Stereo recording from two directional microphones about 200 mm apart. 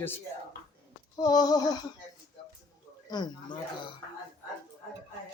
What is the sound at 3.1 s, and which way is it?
Speech, 20° left (ahead or behind).